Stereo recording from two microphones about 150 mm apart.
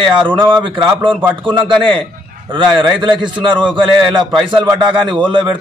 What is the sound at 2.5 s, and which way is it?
A man's voice, 30° right (ahead or behind).